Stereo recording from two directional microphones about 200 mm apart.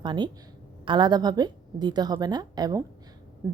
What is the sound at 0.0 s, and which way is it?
A woman's voice, 20° right (ahead or behind).